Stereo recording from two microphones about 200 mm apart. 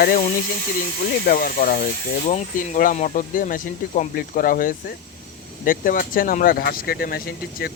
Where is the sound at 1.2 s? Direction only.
45° left (ahead or behind).